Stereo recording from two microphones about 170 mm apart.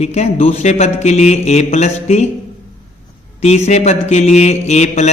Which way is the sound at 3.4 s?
40° left (ahead or behind).